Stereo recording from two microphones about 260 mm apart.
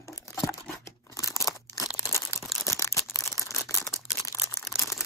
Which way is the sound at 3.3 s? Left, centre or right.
Centre.